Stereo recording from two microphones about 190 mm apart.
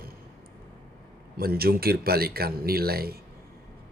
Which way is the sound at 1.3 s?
55° right (ahead or behind).